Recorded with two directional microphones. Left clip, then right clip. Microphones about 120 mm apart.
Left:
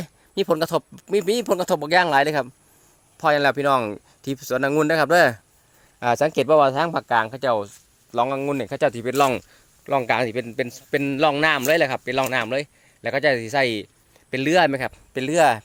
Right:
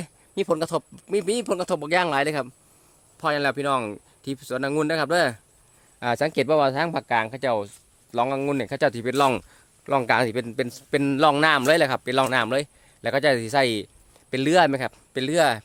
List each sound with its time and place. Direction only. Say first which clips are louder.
0.0 s speech: left 3 dB; 30° left (ahead or behind)
3.2 s speech: left 5 dB; 35° left (ahead or behind)
6.0 s speech: left 4 dB; 5° left (ahead or behind)
6.3 s speech: left 4 dB; 10° right (ahead or behind)
9.3 s a sound: left 1 dB; 15° right (ahead or behind)
10.0 s a man's voice: right 2 dB; 30° right (ahead or behind); by 15.6 s 5° right (ahead or behind)